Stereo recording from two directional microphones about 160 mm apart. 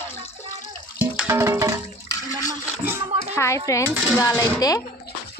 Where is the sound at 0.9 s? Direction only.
15° right (ahead or behind).